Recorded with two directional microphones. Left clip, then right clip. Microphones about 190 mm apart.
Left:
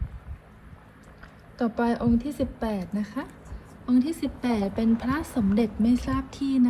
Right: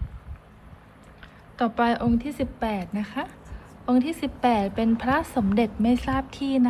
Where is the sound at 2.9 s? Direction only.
30° right (ahead or behind).